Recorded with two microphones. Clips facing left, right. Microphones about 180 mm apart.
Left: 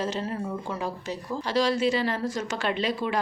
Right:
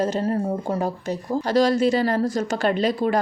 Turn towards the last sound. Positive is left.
turn(degrees=-40)  # may be behind; listen again after turning